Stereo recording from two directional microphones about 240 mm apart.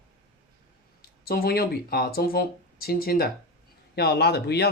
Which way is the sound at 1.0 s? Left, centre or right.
Left.